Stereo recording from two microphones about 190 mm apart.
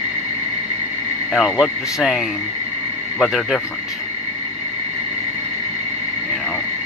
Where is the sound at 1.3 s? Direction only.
Centre (ahead or behind).